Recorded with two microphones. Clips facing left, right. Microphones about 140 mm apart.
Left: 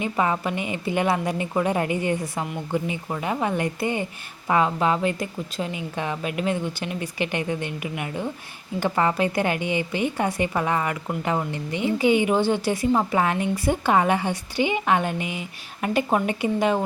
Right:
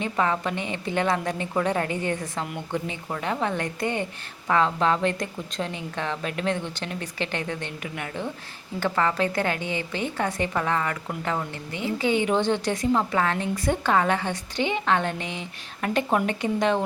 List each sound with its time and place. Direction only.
0.0 s a woman's voice: 10° left (ahead or behind)